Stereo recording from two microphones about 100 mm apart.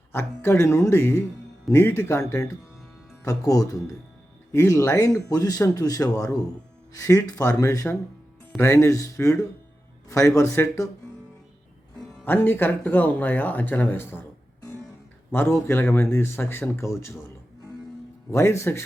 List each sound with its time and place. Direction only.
0.1 s a man's voice: 25° left (ahead or behind)
12.2 s speech: 20° left (ahead or behind)
15.3 s a man's voice: 20° left (ahead or behind)
18.3 s a man's voice: 25° left (ahead or behind)